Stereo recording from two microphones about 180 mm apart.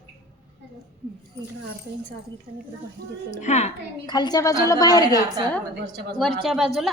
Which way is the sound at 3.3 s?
40° left (ahead or behind).